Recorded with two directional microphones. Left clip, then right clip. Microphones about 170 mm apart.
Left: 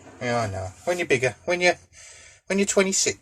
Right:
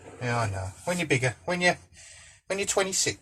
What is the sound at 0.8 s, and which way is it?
Speech, 65° left (ahead or behind).